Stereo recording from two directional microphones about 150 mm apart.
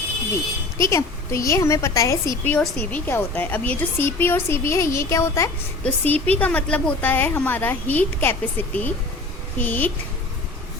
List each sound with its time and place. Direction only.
0.8 s a woman's voice: 20° left (ahead or behind)